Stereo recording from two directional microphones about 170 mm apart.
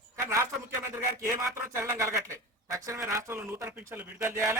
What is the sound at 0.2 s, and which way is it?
Speech, 15° right (ahead or behind).